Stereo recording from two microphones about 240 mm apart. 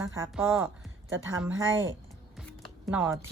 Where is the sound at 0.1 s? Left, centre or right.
Centre.